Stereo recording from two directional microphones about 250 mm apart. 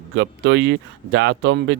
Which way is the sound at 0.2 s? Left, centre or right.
Right.